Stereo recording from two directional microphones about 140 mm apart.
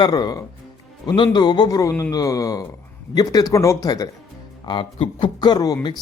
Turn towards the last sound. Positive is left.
turn(degrees=30)  # may be behind; listen again after turning